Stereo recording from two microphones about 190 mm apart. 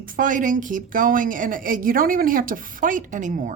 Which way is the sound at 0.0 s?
45° right (ahead or behind).